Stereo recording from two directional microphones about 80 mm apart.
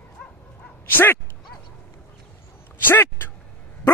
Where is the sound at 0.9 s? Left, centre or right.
Left.